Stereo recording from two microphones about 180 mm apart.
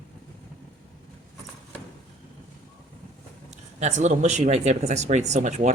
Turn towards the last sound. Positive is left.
turn(degrees=-40)  # may be behind; listen again after turning